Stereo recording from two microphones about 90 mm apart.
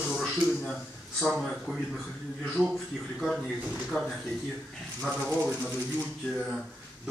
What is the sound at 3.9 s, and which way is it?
Speech, 20° left (ahead or behind).